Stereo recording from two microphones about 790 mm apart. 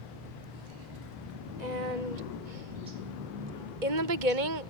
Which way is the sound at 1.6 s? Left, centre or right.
Right.